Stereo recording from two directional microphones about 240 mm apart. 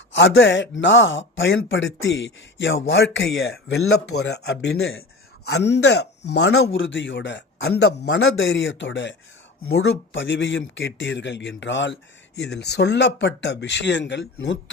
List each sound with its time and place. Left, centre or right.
0.1 s speech: left